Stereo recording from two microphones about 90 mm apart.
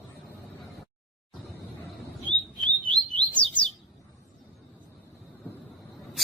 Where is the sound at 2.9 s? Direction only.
15° left (ahead or behind).